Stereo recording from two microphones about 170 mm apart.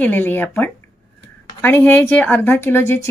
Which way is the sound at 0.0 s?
10° left (ahead or behind).